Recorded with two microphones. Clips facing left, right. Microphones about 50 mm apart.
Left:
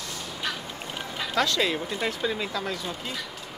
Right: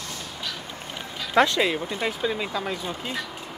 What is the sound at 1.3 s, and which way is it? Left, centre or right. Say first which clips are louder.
Speech: right 6 dB; right.